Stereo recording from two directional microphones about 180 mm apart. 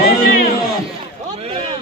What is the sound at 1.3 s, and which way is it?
Speech, 35° right (ahead or behind).